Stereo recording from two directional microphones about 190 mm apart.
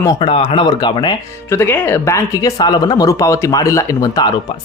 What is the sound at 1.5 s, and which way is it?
Speech, 10° left (ahead or behind).